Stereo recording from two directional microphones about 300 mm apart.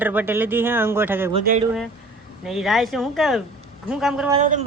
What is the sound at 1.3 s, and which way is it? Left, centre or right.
Speech, right.